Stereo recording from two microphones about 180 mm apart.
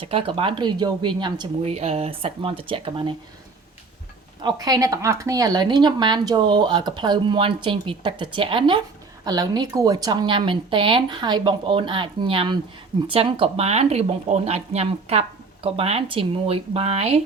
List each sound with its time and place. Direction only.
0.0 s speech: 30° right (ahead or behind)
4.4 s speech: 20° right (ahead or behind)